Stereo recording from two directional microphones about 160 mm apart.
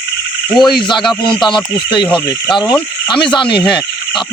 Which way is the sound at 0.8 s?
30° left (ahead or behind).